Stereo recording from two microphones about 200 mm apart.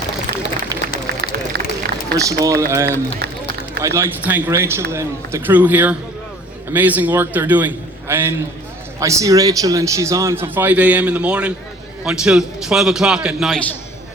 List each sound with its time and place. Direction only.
0.7 s a sound: 15° right (ahead or behind)
1.2 s run: 55° right (ahead or behind)
2.1 s a man's voice: 15° right (ahead or behind)
3.2 s run: 50° right (ahead or behind)
3.8 s a man's voice: 10° right (ahead or behind)